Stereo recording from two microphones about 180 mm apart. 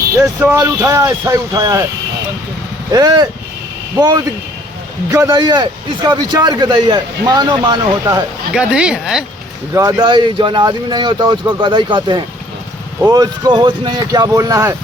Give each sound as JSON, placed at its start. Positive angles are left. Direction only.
{"t": 0.2, "sound": "speech", "side_deg": -15}
{"t": 2.9, "sound": "a man's voice", "side_deg": -20}
{"t": 8.5, "sound": "speech", "side_deg": -5}
{"t": 9.7, "sound": "a man's voice", "side_deg": -20}